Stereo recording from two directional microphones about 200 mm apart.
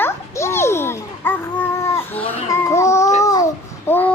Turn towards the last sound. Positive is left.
turn(degrees=10)  # may be behind; listen again after turning